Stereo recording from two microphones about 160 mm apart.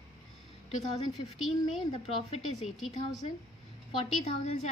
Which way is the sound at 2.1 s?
40° left (ahead or behind).